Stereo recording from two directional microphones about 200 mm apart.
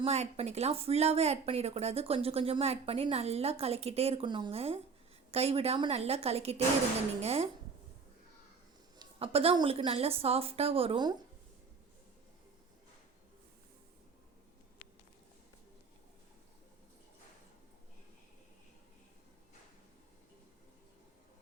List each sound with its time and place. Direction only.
0.0 s speech: 30° right (ahead or behind)
9.0 s a woman's voice: 30° right (ahead or behind)